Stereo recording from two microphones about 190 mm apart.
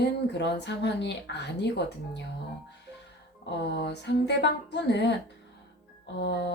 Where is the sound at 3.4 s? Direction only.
60° left (ahead or behind).